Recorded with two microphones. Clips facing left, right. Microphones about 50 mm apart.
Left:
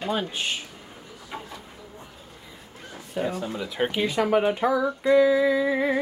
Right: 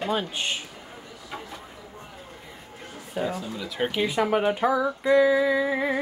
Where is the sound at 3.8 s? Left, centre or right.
Centre.